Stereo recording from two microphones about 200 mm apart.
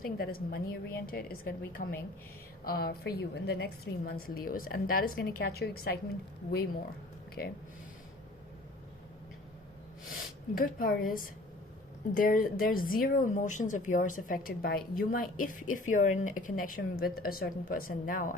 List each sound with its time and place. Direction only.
0.0 s speech: 50° left (ahead or behind)
10.5 s speech: 45° left (ahead or behind)